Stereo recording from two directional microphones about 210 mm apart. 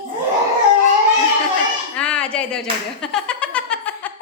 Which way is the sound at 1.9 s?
5° left (ahead or behind).